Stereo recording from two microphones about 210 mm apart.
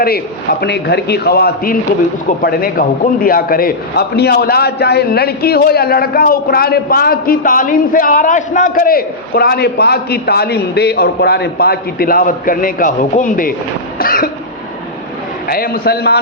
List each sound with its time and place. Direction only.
0.6 s a man's voice: 50° left (ahead or behind)
15.4 s a man's voice: 45° left (ahead or behind)